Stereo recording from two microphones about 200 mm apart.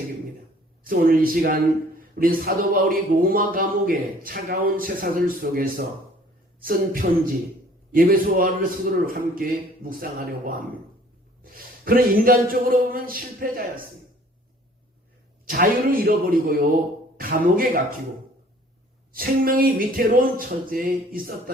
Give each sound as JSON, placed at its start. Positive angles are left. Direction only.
{"t": 0.9, "sound": "speech", "side_deg": -45}
{"t": 11.5, "sound": "speech", "side_deg": -45}
{"t": 15.4, "sound": "speech", "side_deg": -45}
{"t": 19.1, "sound": "speech", "side_deg": -45}